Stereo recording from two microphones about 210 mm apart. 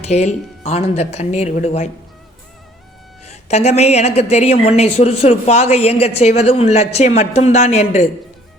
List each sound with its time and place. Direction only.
0.0 s speech: 30° left (ahead or behind)
3.2 s speech: 30° left (ahead or behind)